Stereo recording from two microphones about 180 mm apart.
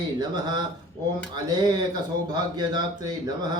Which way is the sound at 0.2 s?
25° right (ahead or behind).